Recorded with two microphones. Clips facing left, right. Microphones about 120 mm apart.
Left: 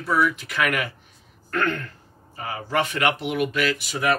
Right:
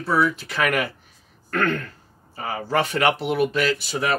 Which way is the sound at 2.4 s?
35° right (ahead or behind).